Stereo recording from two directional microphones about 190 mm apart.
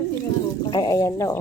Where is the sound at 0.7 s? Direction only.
20° left (ahead or behind).